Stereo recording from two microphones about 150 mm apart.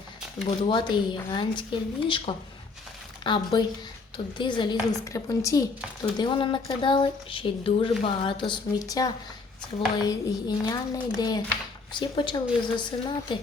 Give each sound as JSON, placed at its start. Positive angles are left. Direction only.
{"t": 0.4, "sound": "a child's voice", "side_deg": 30}